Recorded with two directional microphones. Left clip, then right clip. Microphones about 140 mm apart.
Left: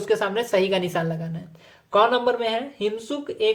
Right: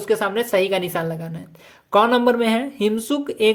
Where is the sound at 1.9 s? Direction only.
40° right (ahead or behind).